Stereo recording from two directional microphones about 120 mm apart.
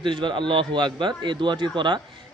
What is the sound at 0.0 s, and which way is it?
Speech, 40° right (ahead or behind).